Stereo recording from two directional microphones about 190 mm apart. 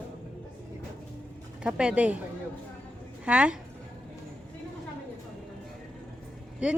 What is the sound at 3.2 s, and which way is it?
Speech, 5° right (ahead or behind).